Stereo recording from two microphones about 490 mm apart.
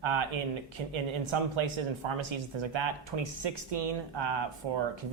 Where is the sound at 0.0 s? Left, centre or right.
Right.